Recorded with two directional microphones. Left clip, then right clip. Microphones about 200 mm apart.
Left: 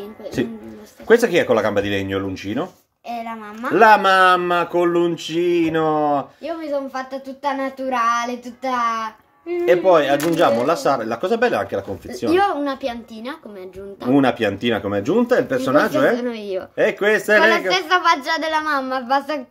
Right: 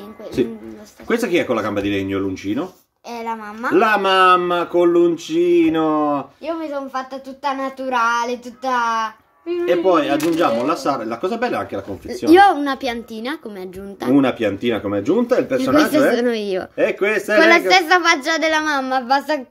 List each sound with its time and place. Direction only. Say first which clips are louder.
1.0 s speech: left 4 dB; 25° left (ahead or behind)
3.1 s a woman's voice: right 2 dB; 25° right (ahead or behind)
3.7 s speech: left 3 dB; 25° left (ahead or behind)
6.4 s speech: even; 25° right (ahead or behind)
9.7 s speech: left 2 dB; 25° left (ahead or behind)
12.3 s speech: right 6 dB; 35° right (ahead or behind)
14.1 s speech: even; 25° left (ahead or behind)
15.7 s speech: right 1 dB; 35° right (ahead or behind)
16.7 s speech: left 2 dB; 30° left (ahead or behind)
17.4 s speech: right 4 dB; 30° right (ahead or behind)